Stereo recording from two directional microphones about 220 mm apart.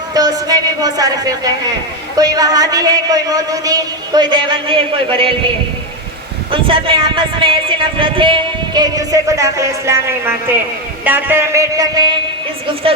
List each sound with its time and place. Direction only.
0.1 s a man's voice: 15° right (ahead or behind)
6.5 s a man's voice: 25° right (ahead or behind)